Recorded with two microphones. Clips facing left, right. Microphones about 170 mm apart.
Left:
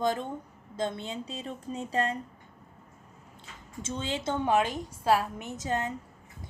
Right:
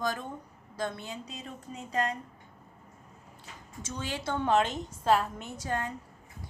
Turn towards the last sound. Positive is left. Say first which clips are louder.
# left 2 dB
turn(degrees=20)  # may be behind; listen again after turning